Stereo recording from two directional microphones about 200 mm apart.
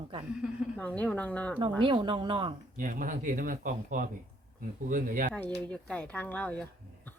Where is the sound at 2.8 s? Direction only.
45° right (ahead or behind).